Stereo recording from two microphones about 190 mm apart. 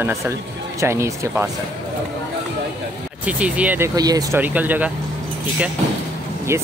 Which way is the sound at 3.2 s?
5° right (ahead or behind).